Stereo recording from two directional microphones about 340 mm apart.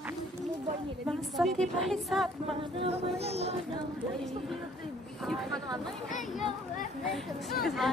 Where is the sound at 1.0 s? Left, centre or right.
Centre.